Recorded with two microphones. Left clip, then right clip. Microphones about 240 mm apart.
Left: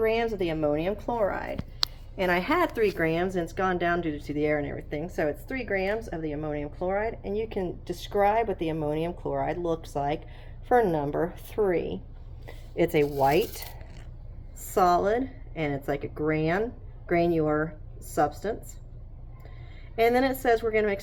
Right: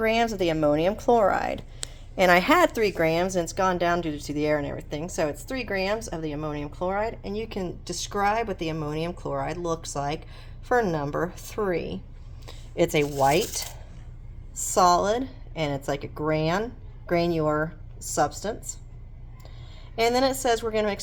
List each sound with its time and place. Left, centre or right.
0.0 s a woman's voice: right
2.7 s a woman's voice: right
12.5 s a sound: right
14.7 s a woman's voice: centre
20.0 s a woman's voice: centre